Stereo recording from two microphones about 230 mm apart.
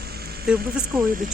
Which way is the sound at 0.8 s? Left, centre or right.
Right.